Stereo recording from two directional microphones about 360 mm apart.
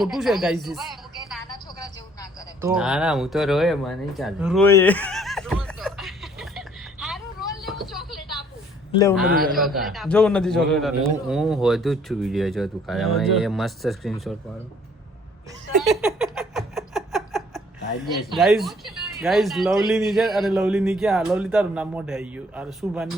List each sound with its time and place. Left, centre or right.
0.0 s speech: centre
2.6 s a sound: centre
8.9 s speech: centre
9.2 s a man's voice: right
9.6 s speech: centre
15.8 s a sound: centre
18.0 s speech: centre